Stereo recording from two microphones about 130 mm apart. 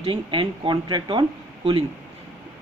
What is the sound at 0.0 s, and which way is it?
Speech, 40° right (ahead or behind).